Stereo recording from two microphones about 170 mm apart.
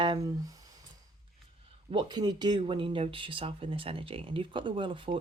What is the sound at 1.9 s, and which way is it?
Speech, 25° right (ahead or behind).